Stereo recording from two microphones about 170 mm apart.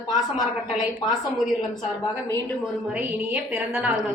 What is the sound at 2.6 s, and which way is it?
A woman's voice, 5° right (ahead or behind).